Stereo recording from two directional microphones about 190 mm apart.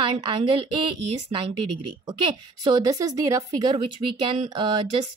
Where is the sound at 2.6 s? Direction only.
20° right (ahead or behind).